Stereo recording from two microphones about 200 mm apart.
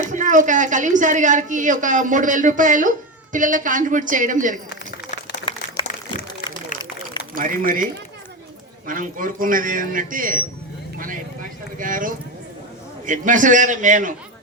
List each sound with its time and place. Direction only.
0.1 s a woman's voice: 40° right (ahead or behind)
5.5 s a sound: 20° left (ahead or behind)
7.3 s a man's voice: 45° right (ahead or behind)
8.9 s a man's voice: 40° right (ahead or behind)
10.9 s vehicle: 45° right (ahead or behind)
11.8 s a man's voice: 40° right (ahead or behind)